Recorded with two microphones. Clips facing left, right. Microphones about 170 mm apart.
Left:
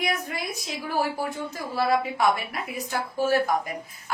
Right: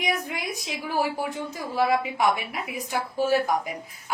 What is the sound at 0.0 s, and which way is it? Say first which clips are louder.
A woman's voice: even; 15° right (ahead or behind).